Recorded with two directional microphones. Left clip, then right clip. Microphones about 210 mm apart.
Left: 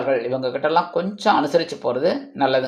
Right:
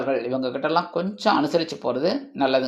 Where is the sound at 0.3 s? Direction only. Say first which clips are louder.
Left 3 dB; 25° right (ahead or behind).